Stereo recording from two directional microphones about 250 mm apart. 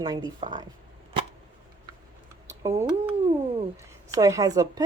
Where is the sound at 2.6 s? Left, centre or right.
Centre.